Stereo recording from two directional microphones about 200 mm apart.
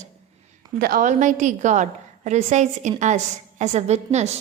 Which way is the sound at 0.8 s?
45° right (ahead or behind).